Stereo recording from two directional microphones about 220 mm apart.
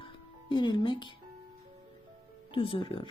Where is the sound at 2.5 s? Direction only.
20° left (ahead or behind).